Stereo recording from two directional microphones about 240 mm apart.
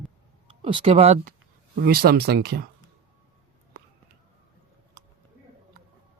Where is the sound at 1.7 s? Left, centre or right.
Right.